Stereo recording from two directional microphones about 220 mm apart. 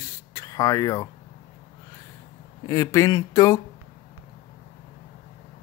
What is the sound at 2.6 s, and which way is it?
Speech, 15° left (ahead or behind).